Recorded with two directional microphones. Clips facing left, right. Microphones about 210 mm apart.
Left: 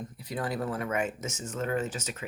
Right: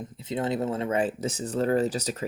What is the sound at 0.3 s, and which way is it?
Speech, 25° right (ahead or behind).